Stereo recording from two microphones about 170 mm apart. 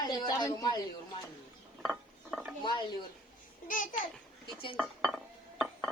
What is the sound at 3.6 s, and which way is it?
Speech, 50° left (ahead or behind).